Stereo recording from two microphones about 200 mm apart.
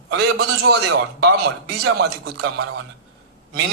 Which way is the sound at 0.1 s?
55° right (ahead or behind).